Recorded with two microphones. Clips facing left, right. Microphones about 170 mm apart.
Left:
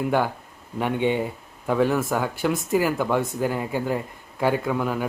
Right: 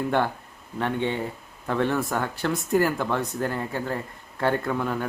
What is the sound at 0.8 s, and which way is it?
Speech, 15° left (ahead or behind).